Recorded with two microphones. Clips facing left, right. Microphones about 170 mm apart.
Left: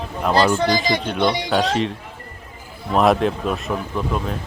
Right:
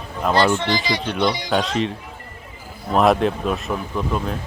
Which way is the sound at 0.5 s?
40° left (ahead or behind).